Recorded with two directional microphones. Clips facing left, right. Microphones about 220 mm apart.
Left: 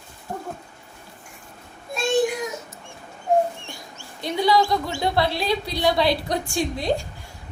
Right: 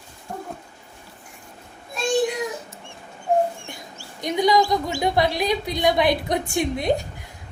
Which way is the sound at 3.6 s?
20° right (ahead or behind).